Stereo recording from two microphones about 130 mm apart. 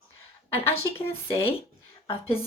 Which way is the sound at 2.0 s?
45° left (ahead or behind).